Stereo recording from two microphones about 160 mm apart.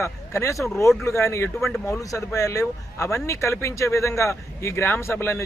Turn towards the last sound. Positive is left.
turn(degrees=15)  # may be behind; listen again after turning